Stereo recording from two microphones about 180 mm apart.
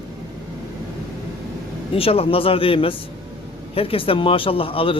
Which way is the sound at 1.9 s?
30° left (ahead or behind).